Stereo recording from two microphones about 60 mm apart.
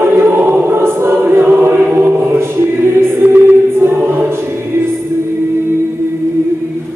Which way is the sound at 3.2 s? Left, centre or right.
Right.